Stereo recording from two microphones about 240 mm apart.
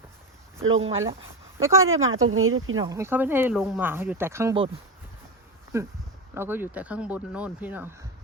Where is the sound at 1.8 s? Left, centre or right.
Right.